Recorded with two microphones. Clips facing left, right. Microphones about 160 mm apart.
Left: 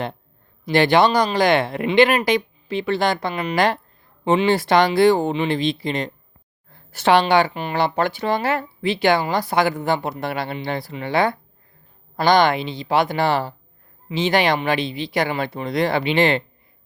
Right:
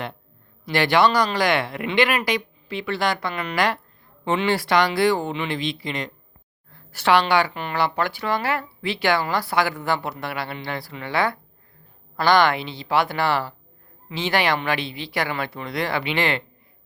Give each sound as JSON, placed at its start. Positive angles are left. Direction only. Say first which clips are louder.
{"t": 0.6, "sound": "speech", "louder": "left 3 dB", "side_deg": 20}